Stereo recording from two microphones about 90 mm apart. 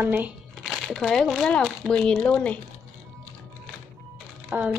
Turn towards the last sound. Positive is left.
turn(degrees=-25)  # may be behind; listen again after turning